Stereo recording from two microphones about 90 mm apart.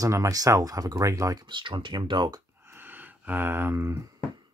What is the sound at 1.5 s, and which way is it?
Speech, 65° right (ahead or behind).